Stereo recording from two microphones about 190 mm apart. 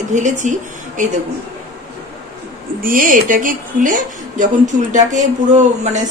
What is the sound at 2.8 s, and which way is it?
A woman's voice, 45° right (ahead or behind).